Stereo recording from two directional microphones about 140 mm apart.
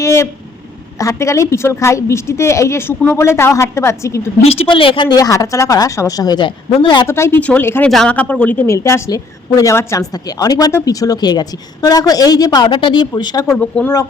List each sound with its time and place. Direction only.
0.0 s a woman's voice: 20° left (ahead or behind)
4.4 s a woman's voice: 45° left (ahead or behind)
7.1 s a woman's voice: 15° left (ahead or behind)
13.5 s speech: 10° left (ahead or behind)